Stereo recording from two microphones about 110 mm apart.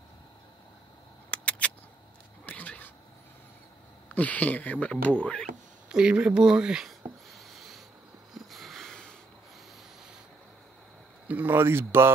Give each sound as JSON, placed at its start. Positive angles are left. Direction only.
{"t": 1.3, "sound": "a sound", "side_deg": 10}
{"t": 2.4, "sound": "cat", "side_deg": 15}
{"t": 4.1, "sound": "speech", "side_deg": 15}
{"t": 5.9, "sound": "speech", "side_deg": -10}
{"t": 7.2, "sound": "a sound", "side_deg": 0}
{"t": 8.3, "sound": "sniff", "side_deg": 0}
{"t": 11.2, "sound": "speech", "side_deg": -15}